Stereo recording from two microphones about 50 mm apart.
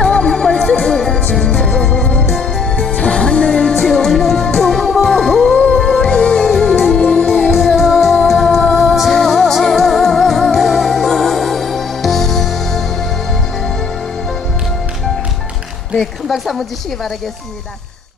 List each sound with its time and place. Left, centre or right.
0.0 s music: centre
0.3 s music: centre
2.9 s music: left; by 7.0 s centre
7.0 s music: centre
7.5 s music: centre
15.9 s music: centre